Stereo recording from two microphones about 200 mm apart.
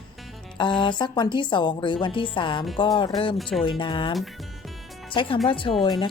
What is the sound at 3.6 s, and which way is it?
A woman's voice, 25° left (ahead or behind).